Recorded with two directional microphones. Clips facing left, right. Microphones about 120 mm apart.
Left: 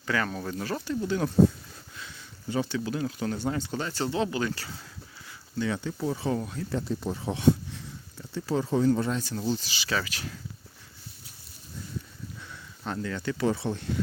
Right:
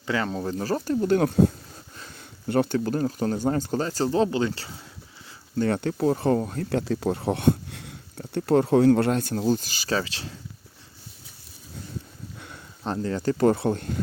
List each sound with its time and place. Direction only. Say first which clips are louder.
0.1 s speech: right 3 dB; 25° right (ahead or behind)
1.0 s speech: right 2 dB; 55° right (ahead or behind); by 4.8 s 25° right (ahead or behind)
5.5 s speech: right 6 dB; 55° right (ahead or behind)
6.7 s speech: right 6 dB; 75° right (ahead or behind); by 10.0 s 45° right (ahead or behind)
10.0 s speech: right 3 dB; 30° right (ahead or behind)
12.8 s speech: right 6 dB; 35° right (ahead or behind); by 14.0 s 50° right (ahead or behind)